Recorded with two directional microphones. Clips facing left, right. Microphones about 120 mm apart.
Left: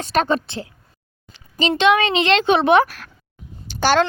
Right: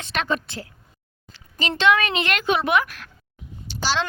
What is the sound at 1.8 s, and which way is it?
Speech, 20° left (ahead or behind).